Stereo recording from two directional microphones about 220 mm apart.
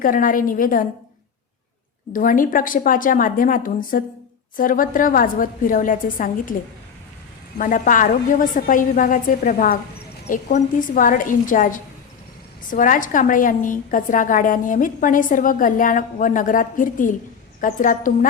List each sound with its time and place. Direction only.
0.0 s a woman's voice: 40° left (ahead or behind)
2.1 s a woman's voice: 40° left (ahead or behind)
7.6 s a woman's voice: 35° left (ahead or behind)